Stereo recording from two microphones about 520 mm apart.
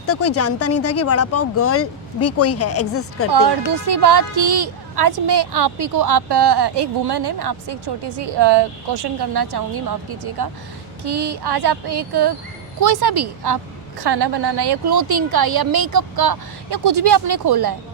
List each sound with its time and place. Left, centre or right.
0.0 s speech: left
3.3 s speech: right